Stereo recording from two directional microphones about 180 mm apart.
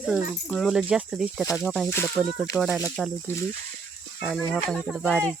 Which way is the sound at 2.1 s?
5° right (ahead or behind).